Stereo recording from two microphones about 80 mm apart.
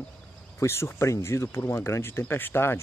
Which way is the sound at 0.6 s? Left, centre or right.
Left.